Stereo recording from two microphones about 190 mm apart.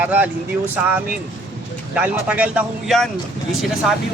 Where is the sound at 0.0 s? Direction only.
10° right (ahead or behind).